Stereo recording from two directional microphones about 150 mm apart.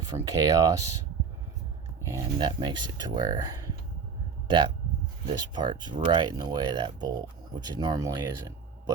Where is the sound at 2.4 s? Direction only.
30° right (ahead or behind).